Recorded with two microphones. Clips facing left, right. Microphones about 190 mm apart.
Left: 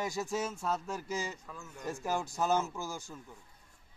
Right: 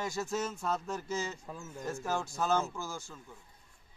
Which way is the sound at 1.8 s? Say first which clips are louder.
Even; 15° left (ahead or behind).